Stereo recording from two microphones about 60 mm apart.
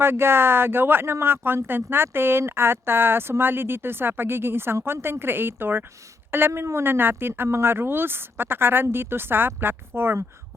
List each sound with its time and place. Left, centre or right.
0.0 s speech: right